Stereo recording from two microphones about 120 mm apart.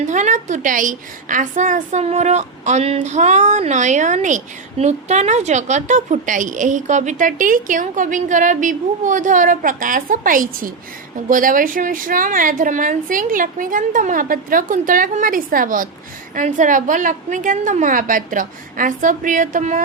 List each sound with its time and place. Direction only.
0.0 s a woman's voice: 90° right
11.3 s a woman's voice: 90° right